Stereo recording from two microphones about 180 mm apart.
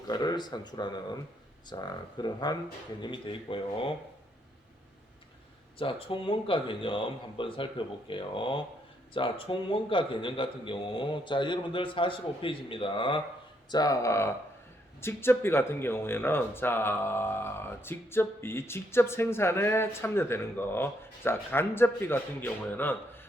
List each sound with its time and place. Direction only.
0.1 s a man's voice: 20° left (ahead or behind)
5.8 s a man's voice: 30° left (ahead or behind); by 23.0 s 10° left (ahead or behind)